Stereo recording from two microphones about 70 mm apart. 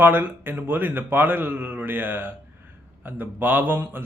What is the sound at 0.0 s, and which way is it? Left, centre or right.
A man's voice, right.